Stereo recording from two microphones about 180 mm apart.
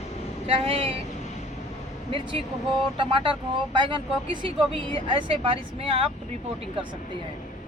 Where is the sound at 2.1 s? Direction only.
30° right (ahead or behind).